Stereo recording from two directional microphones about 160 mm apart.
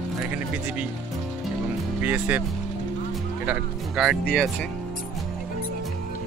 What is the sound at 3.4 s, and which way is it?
Speech, 5° right (ahead or behind).